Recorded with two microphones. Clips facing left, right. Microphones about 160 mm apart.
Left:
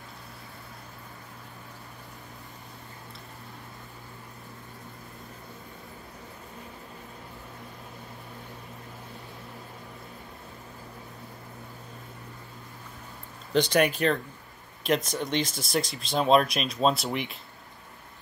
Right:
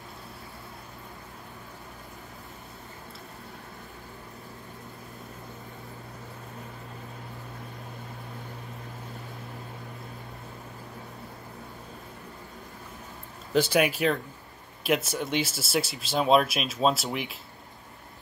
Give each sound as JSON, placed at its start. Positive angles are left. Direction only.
{"t": 13.5, "sound": "speech", "side_deg": -5}